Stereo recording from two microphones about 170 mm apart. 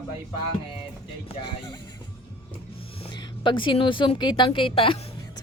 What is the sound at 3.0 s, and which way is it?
A woman's voice, 30° left (ahead or behind).